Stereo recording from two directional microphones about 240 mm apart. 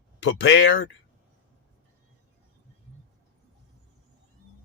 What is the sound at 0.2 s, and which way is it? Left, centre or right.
Speech, left.